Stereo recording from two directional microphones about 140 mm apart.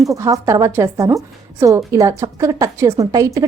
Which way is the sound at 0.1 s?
20° right (ahead or behind).